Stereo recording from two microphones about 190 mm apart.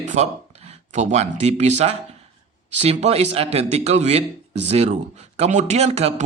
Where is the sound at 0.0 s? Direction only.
40° right (ahead or behind).